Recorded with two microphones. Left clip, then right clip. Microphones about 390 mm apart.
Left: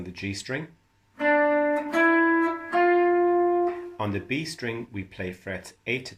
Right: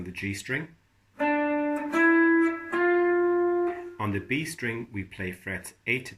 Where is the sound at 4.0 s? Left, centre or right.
Left.